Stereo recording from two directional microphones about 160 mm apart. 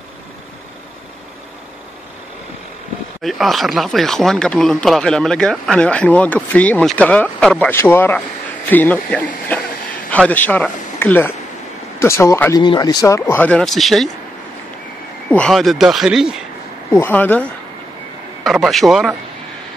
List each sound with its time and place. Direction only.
3.3 s speech: centre (ahead or behind)
15.2 s speech: 5° left (ahead or behind)
17.0 s speech: 10° left (ahead or behind)
18.4 s speech: centre (ahead or behind)